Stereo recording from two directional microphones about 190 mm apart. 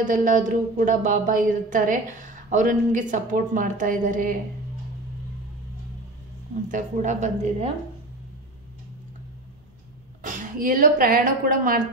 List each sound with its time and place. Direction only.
0.0 s a woman's voice: 45° right (ahead or behind)
6.7 s a woman's voice: 40° right (ahead or behind)
10.2 s a woman's voice: 45° right (ahead or behind)